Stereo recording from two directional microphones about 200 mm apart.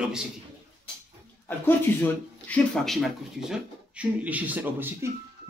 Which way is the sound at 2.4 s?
5° left (ahead or behind).